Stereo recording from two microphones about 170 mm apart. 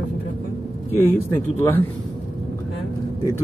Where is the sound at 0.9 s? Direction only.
15° left (ahead or behind).